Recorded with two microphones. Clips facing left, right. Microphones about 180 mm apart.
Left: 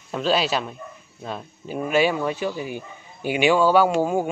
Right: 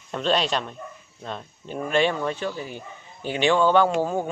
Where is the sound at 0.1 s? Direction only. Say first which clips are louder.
Left 2 dB; 5° left (ahead or behind).